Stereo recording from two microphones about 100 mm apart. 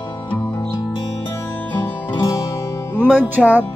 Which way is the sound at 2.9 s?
15° right (ahead or behind).